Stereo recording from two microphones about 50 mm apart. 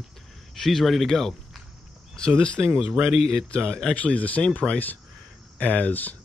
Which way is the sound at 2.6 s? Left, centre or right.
Right.